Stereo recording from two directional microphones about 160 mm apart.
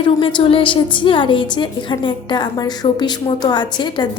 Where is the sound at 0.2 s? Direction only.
30° left (ahead or behind).